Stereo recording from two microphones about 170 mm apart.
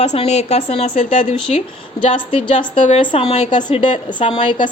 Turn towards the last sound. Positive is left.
turn(degrees=30)  # may be behind; listen again after turning